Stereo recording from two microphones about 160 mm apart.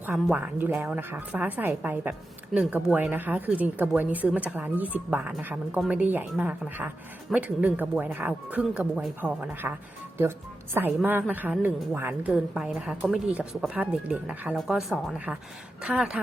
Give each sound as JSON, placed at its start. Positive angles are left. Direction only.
{"t": 0.0, "sound": "a woman's voice", "side_deg": -10}
{"t": 10.8, "sound": "a woman's voice", "side_deg": -10}